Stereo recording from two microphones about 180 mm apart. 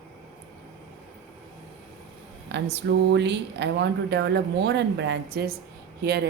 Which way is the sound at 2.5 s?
70° right (ahead or behind).